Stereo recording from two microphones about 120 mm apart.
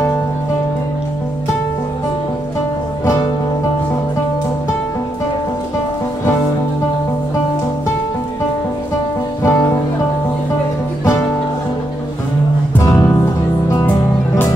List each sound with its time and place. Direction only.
9.4 s music: 25° left (ahead or behind)
12.7 s music: 25° left (ahead or behind)